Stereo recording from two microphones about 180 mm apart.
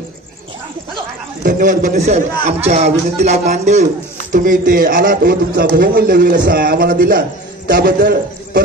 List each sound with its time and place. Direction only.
1.4 s a man's voice: 45° right (ahead or behind)